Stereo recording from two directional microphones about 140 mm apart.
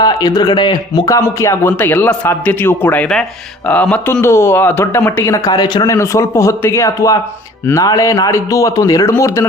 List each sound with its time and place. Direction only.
0.0 s speech: 25° left (ahead or behind)